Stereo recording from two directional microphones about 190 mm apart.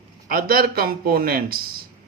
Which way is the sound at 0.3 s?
50° right (ahead or behind).